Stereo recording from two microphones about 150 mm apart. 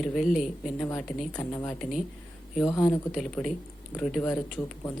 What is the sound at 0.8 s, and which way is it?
Speech, 10° left (ahead or behind).